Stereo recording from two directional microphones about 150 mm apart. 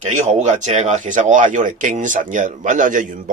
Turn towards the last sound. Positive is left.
turn(degrees=-60)  # may be behind; listen again after turning